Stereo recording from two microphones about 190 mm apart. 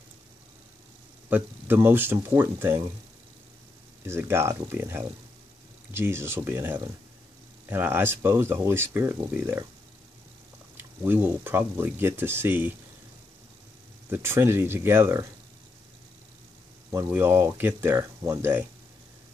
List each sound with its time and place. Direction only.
1.3 s speech: 10° right (ahead or behind)
4.0 s speech: 10° right (ahead or behind)
10.8 s speech: 10° right (ahead or behind)
14.1 s speech: 10° right (ahead or behind)
16.9 s speech: 10° right (ahead or behind)